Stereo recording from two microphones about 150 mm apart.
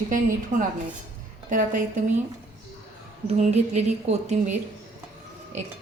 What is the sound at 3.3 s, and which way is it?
Speech, 50° right (ahead or behind).